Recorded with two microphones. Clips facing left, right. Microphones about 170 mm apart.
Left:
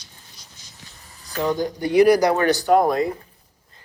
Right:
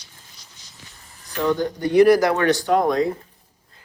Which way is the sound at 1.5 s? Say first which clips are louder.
Right 2 dB; 10° left (ahead or behind).